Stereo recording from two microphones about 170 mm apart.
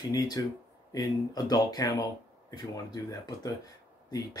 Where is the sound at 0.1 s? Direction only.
25° left (ahead or behind).